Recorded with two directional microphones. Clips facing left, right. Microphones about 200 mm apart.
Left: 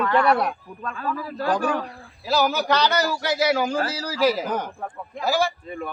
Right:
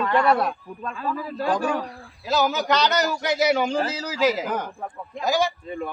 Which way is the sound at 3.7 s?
20° right (ahead or behind).